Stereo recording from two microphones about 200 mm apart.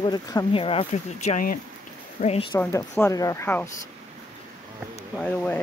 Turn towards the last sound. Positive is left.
turn(degrees=10)  # may be behind; listen again after turning